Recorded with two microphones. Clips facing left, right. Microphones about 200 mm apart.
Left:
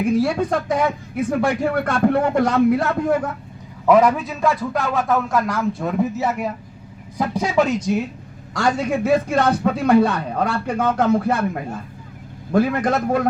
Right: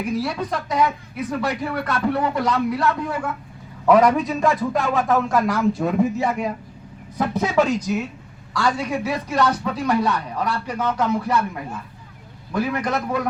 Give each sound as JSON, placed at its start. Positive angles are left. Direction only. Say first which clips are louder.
{"t": 0.2, "sound": "speech", "louder": "left 6 dB", "side_deg": 50}
{"t": 3.8, "sound": "speech", "louder": "even", "side_deg": 10}
{"t": 7.8, "sound": "speech", "louder": "left 3 dB", "side_deg": 30}
{"t": 8.5, "sound": "speech", "louder": "left 3 dB", "side_deg": 45}